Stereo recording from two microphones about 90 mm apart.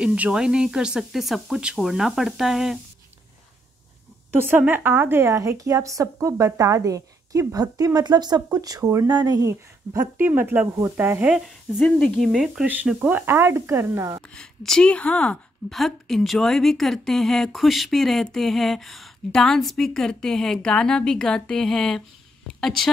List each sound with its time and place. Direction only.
0.0 s speech: 10° right (ahead or behind)
4.3 s a woman's voice: 25° right (ahead or behind); by 9.5 s 45° right (ahead or behind)
9.5 s speech: 30° right (ahead or behind)
11.3 s speech: centre (ahead or behind)
12.6 s speech: 15° right (ahead or behind)
13.2 s speech: 25° right (ahead or behind)
14.3 s a woman's voice: 5° left (ahead or behind)
15.7 s a woman's voice: centre (ahead or behind)